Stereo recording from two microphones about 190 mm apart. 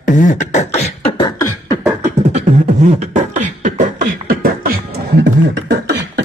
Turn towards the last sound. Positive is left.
turn(degrees=-65)  # may be behind; listen again after turning